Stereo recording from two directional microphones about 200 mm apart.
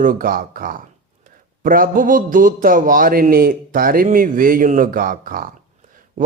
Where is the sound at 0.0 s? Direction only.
45° right (ahead or behind).